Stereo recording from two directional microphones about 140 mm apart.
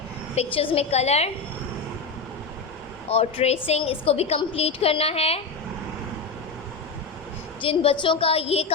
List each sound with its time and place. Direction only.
0.3 s a woman's voice: 40° left (ahead or behind)
3.1 s a woman's voice: 45° left (ahead or behind)
7.6 s a woman's voice: 40° left (ahead or behind)